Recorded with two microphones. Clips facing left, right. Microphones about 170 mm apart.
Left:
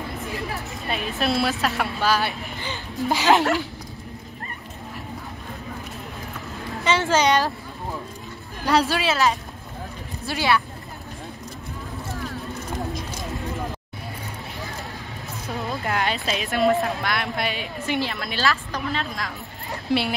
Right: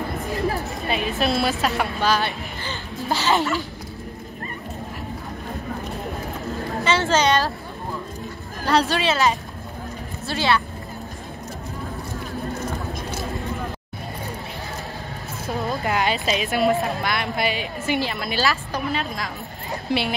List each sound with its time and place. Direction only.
0.8 s speech: centre (ahead or behind)
2.6 s a sound: 15° left (ahead or behind)
6.8 s a woman's voice: 15° left (ahead or behind)
8.6 s speech: 5° left (ahead or behind)
10.2 s speech: 10° left (ahead or behind)
15.8 s speech: 5° right (ahead or behind)